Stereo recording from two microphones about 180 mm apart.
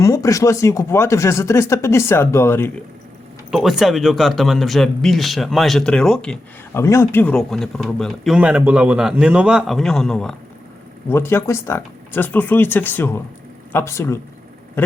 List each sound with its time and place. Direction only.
0.0 s speech: 15° left (ahead or behind)
3.5 s speech: centre (ahead or behind)
6.8 s speech: 15° left (ahead or behind)